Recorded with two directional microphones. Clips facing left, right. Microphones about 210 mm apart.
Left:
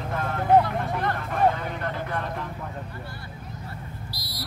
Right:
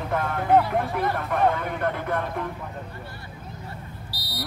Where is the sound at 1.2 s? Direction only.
55° right (ahead or behind).